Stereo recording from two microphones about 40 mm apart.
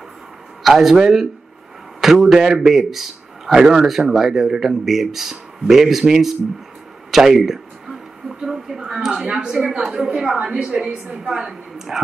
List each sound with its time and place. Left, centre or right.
0.7 s a man's voice: centre
7.1 s a sound: centre
9.8 s a woman's voice: centre